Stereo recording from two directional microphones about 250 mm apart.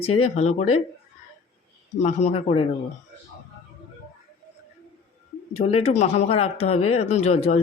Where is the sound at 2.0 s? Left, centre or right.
Left.